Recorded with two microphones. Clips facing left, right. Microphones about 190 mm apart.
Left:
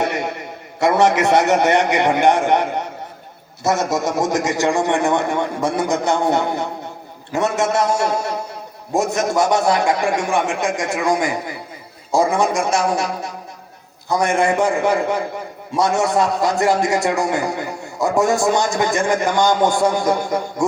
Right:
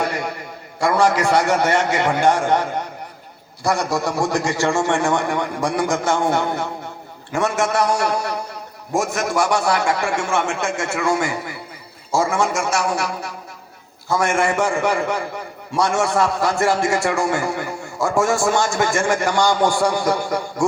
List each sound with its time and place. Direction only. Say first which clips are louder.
0.0 s a man's voice: left 2 dB; 25° left (ahead or behind)